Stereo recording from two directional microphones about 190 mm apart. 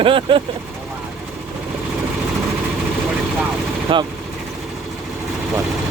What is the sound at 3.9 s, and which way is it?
Speech, 25° right (ahead or behind).